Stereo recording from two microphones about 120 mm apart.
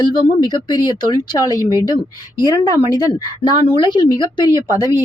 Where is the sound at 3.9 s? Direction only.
35° left (ahead or behind).